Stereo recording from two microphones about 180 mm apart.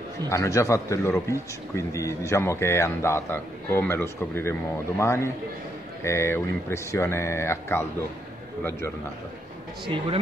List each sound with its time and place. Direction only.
0.3 s speech: 15° left (ahead or behind)